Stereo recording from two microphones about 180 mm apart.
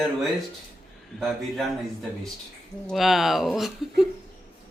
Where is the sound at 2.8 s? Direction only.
Centre (ahead or behind).